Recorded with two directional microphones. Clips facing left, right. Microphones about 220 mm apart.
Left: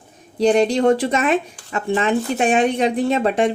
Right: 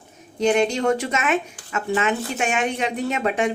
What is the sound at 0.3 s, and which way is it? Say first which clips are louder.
Speech: left 4 dB; 35° left (ahead or behind).